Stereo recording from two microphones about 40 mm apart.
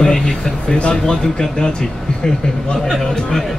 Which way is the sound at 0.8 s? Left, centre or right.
Left.